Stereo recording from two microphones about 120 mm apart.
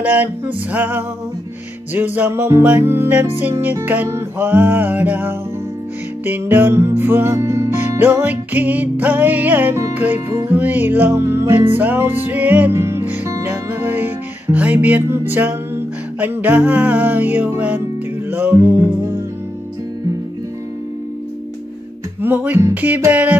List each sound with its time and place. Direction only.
0.0 s music: 15° right (ahead or behind)
22.2 s music: 15° right (ahead or behind)